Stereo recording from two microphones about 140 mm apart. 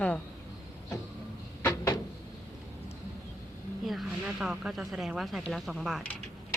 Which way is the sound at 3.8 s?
Centre (ahead or behind).